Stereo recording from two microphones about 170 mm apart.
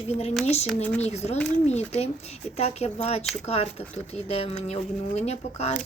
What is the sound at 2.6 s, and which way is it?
Speech, 40° left (ahead or behind).